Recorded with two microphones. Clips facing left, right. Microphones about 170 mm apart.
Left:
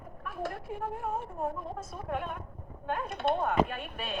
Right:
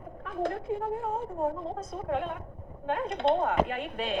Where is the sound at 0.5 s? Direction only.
25° right (ahead or behind).